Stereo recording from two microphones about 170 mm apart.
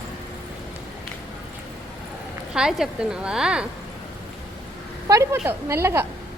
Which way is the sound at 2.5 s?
5° right (ahead or behind).